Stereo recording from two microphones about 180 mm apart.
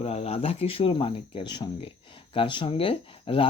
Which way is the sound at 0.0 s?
35° left (ahead or behind).